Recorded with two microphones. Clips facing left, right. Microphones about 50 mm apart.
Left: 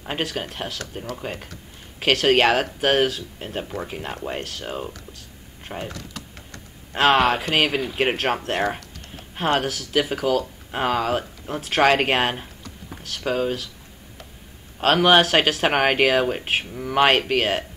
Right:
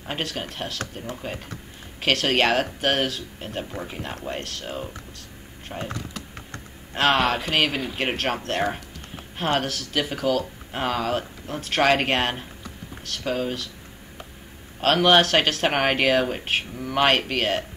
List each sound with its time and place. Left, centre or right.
0.0 s speech: centre
5.7 s speech: centre
6.9 s speech: centre
14.8 s speech: centre